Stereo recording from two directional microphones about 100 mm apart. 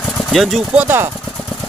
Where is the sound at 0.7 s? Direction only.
20° right (ahead or behind).